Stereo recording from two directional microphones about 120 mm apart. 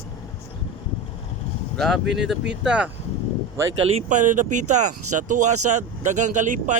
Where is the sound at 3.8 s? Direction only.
60° right (ahead or behind).